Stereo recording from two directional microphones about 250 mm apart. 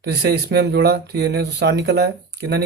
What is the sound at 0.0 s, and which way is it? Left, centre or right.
Speech, right.